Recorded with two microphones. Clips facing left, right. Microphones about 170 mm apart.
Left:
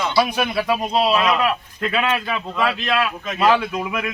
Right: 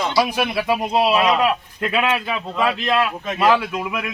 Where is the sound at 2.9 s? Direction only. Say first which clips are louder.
Right 2 dB; 30° right (ahead or behind).